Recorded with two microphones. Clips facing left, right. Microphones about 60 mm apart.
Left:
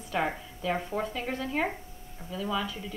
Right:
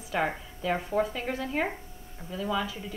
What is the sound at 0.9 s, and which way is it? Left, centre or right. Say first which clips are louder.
Speech: right 5 dB; right.